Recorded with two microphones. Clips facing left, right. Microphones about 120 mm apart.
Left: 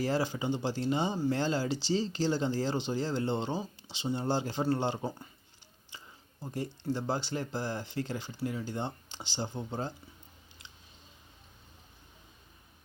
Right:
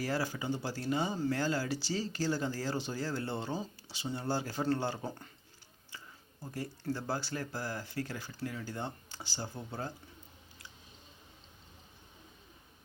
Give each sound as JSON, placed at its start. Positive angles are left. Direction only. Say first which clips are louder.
{"t": 0.0, "sound": "speech", "louder": "left 4 dB", "side_deg": 25}
{"t": 6.4, "sound": "speech", "louder": "left 3 dB", "side_deg": 20}